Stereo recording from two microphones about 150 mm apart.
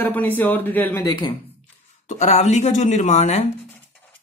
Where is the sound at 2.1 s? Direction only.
50° left (ahead or behind).